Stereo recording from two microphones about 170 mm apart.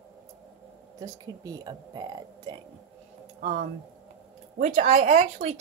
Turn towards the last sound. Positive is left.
turn(degrees=-40)  # may be behind; listen again after turning